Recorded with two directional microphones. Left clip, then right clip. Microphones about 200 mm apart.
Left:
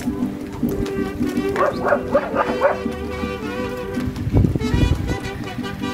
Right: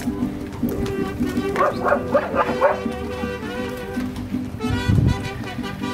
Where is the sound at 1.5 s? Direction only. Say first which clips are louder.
Even; 35° right (ahead or behind).